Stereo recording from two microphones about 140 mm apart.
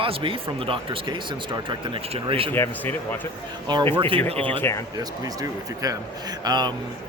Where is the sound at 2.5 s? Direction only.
15° left (ahead or behind).